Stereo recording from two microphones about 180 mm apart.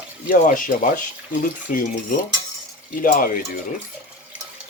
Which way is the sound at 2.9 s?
50° left (ahead or behind).